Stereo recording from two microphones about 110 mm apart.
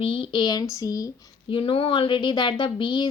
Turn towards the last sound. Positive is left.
turn(degrees=45)  # may be behind; listen again after turning